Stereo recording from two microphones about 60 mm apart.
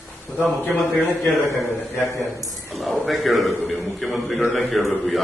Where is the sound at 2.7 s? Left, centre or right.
Centre.